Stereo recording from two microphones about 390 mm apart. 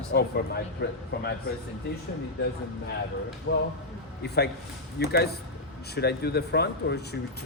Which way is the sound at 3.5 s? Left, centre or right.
Left.